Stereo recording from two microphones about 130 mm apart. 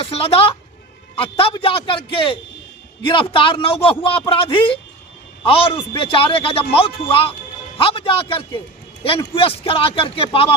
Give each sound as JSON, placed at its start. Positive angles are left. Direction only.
{"t": 0.0, "sound": "a man's voice", "side_deg": 50}